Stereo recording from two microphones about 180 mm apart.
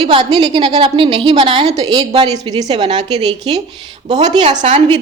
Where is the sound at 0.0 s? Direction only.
25° right (ahead or behind).